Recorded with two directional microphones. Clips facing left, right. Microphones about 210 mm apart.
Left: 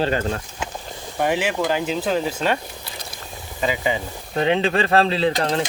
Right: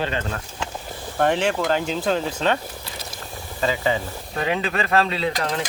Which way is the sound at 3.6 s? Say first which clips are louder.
Even; 15° left (ahead or behind).